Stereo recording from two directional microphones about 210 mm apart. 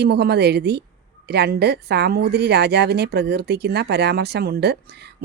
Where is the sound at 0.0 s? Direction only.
50° right (ahead or behind).